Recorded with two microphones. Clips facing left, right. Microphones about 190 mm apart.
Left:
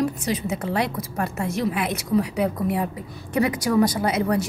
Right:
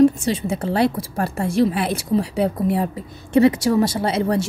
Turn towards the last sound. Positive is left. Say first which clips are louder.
# right 2 dB
turn(degrees=-30)  # may be behind; listen again after turning